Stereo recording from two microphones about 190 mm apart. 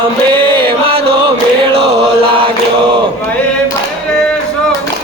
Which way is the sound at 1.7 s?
30° right (ahead or behind).